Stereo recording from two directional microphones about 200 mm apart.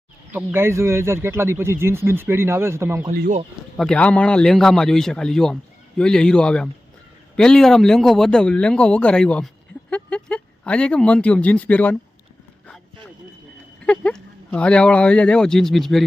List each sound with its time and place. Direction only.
0.3 s speech: 10° right (ahead or behind)
3.1 s speech: 40° right (ahead or behind)
3.8 s speech: 5° left (ahead or behind)
13.8 s speech: 5° left (ahead or behind)